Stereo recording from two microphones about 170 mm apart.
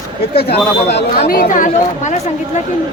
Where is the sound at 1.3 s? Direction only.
55° left (ahead or behind).